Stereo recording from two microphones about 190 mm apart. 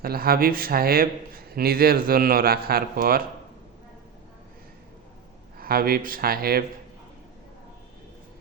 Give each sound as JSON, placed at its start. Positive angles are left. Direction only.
{"t": 0.0, "sound": "speech", "side_deg": -55}
{"t": 5.5, "sound": "speech", "side_deg": -50}